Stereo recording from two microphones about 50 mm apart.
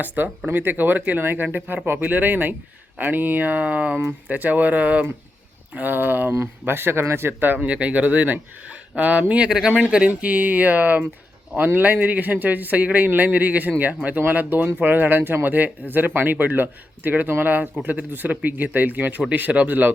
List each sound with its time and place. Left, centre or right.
0.2 s a man's voice: right
1.2 s a man's voice: right
7.3 s a man's voice: right
7.6 s speech: right
9.5 s a man's voice: centre; by 19.9 s right